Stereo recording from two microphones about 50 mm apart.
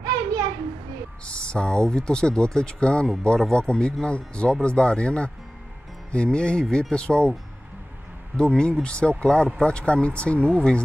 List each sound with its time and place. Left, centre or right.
1.2 s speech: left
8.4 s speech: centre